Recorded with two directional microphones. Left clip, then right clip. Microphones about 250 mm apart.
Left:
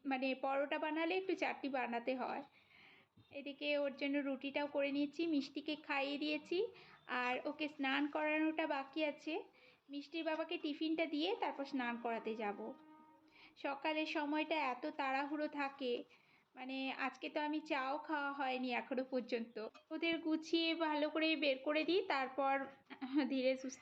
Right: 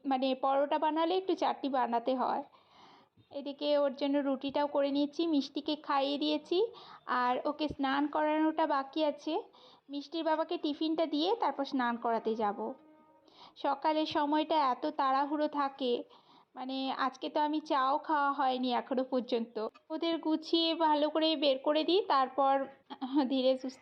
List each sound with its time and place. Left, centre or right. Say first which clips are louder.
0.0 s a woman's voice: right 9 dB; right
20.4 s a woman's voice: right 7 dB; centre
20.7 s a woman's voice: right 9 dB; right
23.3 s a woman's voice: right 8 dB; centre